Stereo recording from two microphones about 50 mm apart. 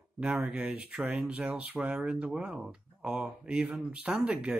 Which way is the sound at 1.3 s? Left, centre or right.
Right.